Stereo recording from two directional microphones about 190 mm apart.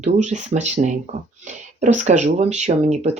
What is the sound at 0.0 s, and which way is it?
Speech, 40° right (ahead or behind).